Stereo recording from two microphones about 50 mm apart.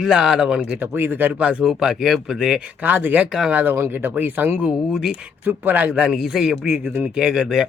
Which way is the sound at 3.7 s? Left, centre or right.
Right.